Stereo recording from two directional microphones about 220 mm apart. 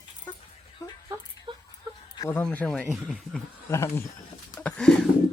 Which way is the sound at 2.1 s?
10° left (ahead or behind).